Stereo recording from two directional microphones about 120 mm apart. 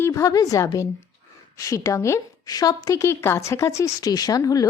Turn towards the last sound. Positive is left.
turn(degrees=30)  # may be behind; listen again after turning